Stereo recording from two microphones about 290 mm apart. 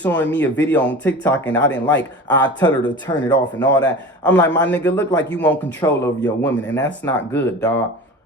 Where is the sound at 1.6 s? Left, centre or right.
Left.